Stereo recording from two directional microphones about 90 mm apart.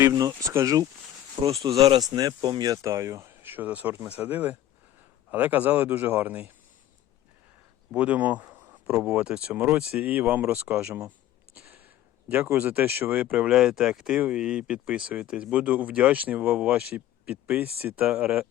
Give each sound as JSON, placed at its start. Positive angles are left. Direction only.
{"t": 0.1, "sound": "a man's voice", "side_deg": -45}
{"t": 7.9, "sound": "a man's voice", "side_deg": -15}
{"t": 12.5, "sound": "speech", "side_deg": -20}